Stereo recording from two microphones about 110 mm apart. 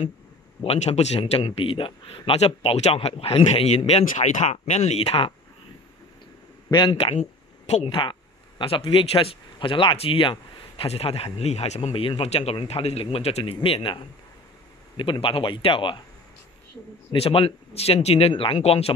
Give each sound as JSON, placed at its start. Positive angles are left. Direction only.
{"t": 0.7, "sound": "speech", "side_deg": 75}
{"t": 1.4, "sound": "speech", "side_deg": 55}
{"t": 6.7, "sound": "speech", "side_deg": 45}
{"t": 7.6, "sound": "speech", "side_deg": 65}
{"t": 11.9, "sound": "speech", "side_deg": 55}
{"t": 17.1, "sound": "speech", "side_deg": 55}
{"t": 18.3, "sound": "speech", "side_deg": 50}
{"t": 18.6, "sound": "speech", "side_deg": 65}